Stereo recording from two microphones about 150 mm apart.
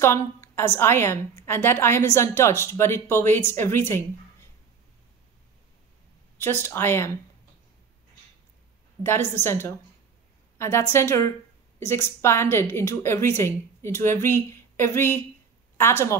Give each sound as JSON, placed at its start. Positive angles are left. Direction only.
{"t": 0.7, "sound": "a woman's voice", "side_deg": 15}
{"t": 6.3, "sound": "a woman's voice", "side_deg": 15}
{"t": 9.0, "sound": "a woman's voice", "side_deg": 15}